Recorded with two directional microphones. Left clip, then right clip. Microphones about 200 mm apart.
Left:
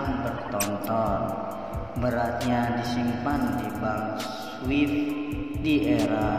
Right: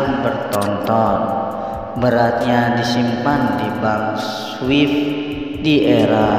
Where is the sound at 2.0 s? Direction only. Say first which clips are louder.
Right 12 dB; 35° right (ahead or behind).